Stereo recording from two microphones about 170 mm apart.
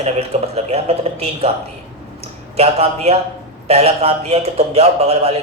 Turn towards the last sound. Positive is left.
turn(degrees=-35)  # may be behind; listen again after turning